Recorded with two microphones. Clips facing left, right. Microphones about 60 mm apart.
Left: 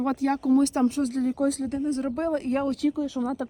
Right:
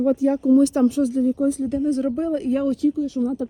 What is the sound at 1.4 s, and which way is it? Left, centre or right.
Speech, left.